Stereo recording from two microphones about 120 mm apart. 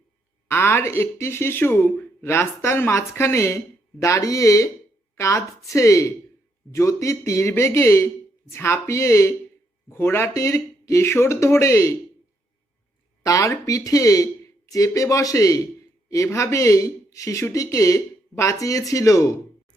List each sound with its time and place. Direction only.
0.4 s speech: 20° left (ahead or behind)
13.2 s speech: 25° left (ahead or behind)